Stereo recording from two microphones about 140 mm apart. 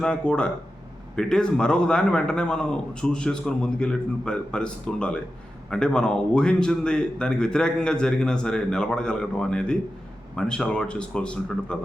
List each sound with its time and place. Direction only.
0.0 s a man's voice: 5° left (ahead or behind)